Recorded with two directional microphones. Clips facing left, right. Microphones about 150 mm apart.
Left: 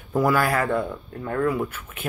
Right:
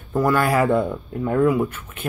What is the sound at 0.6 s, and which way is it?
Speech, 15° right (ahead or behind).